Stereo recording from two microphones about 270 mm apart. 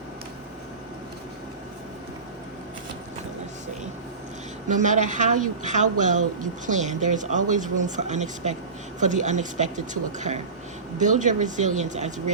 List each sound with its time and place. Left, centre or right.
4.7 s speech: right